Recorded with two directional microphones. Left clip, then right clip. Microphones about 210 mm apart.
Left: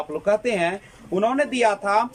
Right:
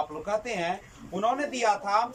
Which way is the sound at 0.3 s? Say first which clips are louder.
Left 10 dB; 45° left (ahead or behind).